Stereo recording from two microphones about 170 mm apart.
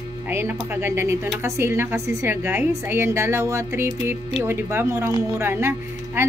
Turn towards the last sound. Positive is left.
turn(degrees=-15)  # may be behind; listen again after turning